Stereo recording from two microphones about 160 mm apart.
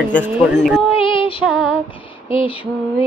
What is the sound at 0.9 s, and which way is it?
Female singing, 30° left (ahead or behind).